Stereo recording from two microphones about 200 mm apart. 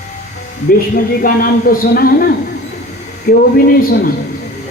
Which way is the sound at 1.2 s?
45° left (ahead or behind).